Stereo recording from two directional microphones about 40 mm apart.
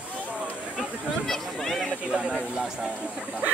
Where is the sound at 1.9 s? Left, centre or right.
Right.